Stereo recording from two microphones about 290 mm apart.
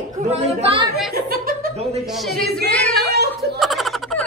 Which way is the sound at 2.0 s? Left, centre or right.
Centre.